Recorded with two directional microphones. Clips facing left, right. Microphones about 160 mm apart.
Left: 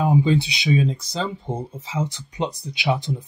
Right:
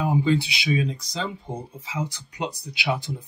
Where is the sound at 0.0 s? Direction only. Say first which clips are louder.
Left 3 dB; 20° left (ahead or behind).